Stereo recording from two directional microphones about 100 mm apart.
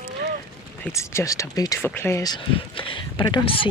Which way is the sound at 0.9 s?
30° left (ahead or behind).